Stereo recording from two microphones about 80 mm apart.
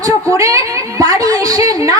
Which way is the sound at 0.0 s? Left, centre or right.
Right.